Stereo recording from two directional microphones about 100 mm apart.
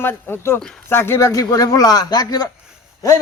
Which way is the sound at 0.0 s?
20° left (ahead or behind).